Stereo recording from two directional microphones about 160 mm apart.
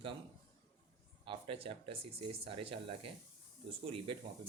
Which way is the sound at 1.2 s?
35° right (ahead or behind).